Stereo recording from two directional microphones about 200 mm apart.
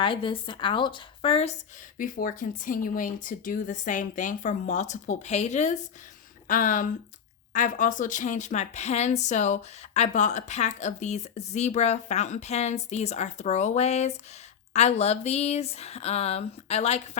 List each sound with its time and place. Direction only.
0.0 s a woman's voice: 25° left (ahead or behind)
2.0 s a woman's voice: 45° left (ahead or behind)